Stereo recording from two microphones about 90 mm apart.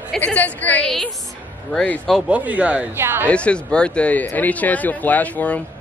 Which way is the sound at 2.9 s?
25° right (ahead or behind).